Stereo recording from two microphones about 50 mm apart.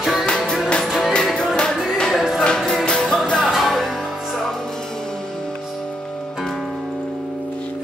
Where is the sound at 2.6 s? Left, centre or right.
Centre.